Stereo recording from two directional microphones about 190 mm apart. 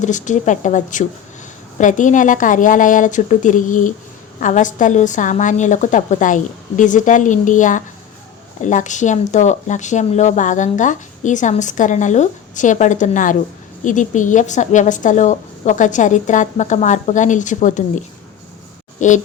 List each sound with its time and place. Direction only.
0.0 s a woman's voice: 40° left (ahead or behind)